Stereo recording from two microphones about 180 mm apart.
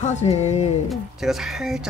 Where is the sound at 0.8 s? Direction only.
Centre (ahead or behind).